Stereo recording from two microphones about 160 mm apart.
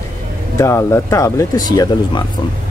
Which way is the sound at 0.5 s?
15° left (ahead or behind).